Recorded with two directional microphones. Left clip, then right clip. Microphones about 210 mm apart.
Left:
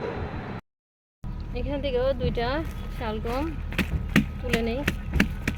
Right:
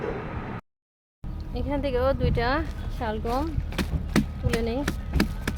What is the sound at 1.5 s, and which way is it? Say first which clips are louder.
Speech: even; 5° right (ahead or behind).